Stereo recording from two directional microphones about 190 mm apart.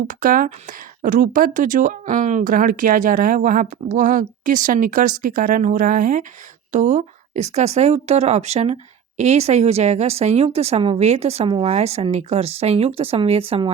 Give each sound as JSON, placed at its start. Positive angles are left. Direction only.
{"t": 0.1, "sound": "speech", "side_deg": -45}